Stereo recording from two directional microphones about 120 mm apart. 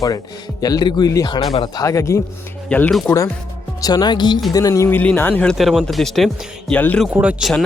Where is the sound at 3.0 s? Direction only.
25° left (ahead or behind).